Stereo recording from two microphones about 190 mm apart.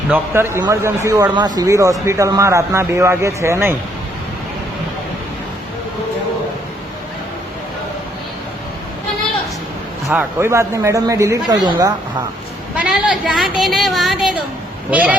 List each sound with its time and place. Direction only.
0.1 s a man's voice: 15° right (ahead or behind)
10.1 s a man's voice: 10° right (ahead or behind)
12.7 s a sound: 5° right (ahead or behind)
14.8 s a man's voice: 5° right (ahead or behind)